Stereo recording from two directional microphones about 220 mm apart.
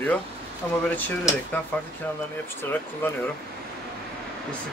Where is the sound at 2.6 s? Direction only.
10° left (ahead or behind).